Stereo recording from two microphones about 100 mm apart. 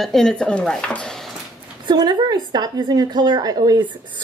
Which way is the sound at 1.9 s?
45° right (ahead or behind).